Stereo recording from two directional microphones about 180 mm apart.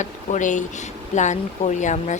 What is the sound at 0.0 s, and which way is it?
Speech, 45° left (ahead or behind).